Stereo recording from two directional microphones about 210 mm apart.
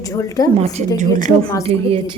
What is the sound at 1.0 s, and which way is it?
Speech, 35° right (ahead or behind).